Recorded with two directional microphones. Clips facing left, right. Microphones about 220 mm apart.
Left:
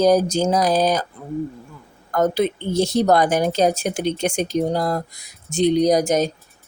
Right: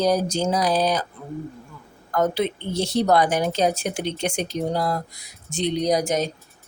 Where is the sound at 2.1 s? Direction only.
45° left (ahead or behind).